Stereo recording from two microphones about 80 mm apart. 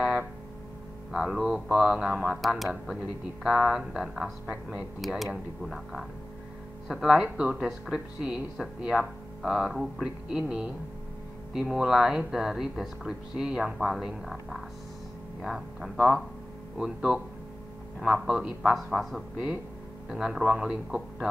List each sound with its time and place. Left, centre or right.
1.1 s speech: centre
7.5 s speech: centre
15.4 s speech: centre
16.7 s speech: centre
18.2 s speech: centre
18.6 s speech: centre
19.3 s speech: centre